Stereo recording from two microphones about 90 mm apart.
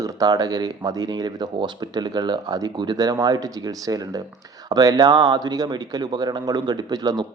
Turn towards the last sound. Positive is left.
turn(degrees=-50)  # may be behind; listen again after turning